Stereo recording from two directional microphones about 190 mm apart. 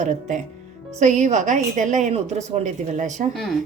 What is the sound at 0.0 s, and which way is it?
A woman's voice, 40° right (ahead or behind).